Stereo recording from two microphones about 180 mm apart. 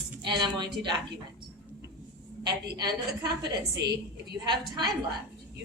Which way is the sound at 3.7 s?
65° right (ahead or behind).